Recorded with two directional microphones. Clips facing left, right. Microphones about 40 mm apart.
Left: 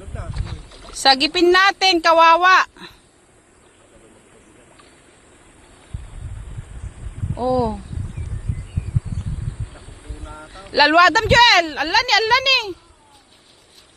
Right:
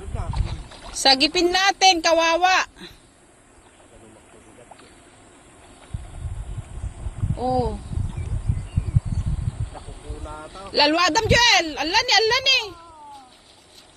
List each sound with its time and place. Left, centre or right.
0.7 s a woman's voice: centre
7.3 s speech: left
9.7 s vehicle: left
10.2 s a sound: centre
10.8 s speech: left
11.2 s speech: left
11.4 s a woman's voice: left